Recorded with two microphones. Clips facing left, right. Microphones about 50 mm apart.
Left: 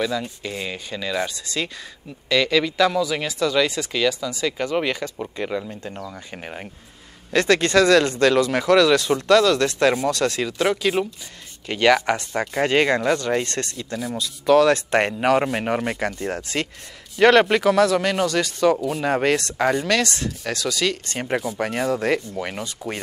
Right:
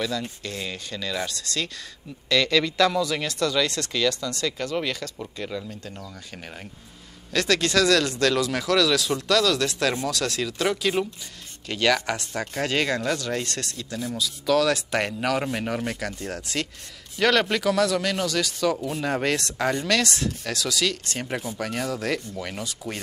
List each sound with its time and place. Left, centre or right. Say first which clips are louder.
0.0 s speech: left 4 dB; centre
19.3 s speech: left 4 dB; centre
19.7 s speech: left 2 dB; centre
20.0 s speech: left 2 dB; centre; by 22.9 s left